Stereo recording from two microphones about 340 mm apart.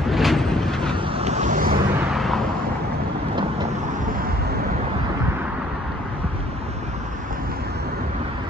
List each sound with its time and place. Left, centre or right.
0.1 s vehicle: centre
1.0 s vehicle: centre
2.1 s vehicle: centre